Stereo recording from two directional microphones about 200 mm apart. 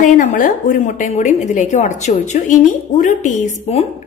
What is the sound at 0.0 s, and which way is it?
A woman's voice, 40° left (ahead or behind).